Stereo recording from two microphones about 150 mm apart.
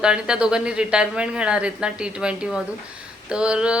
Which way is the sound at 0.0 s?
5° right (ahead or behind).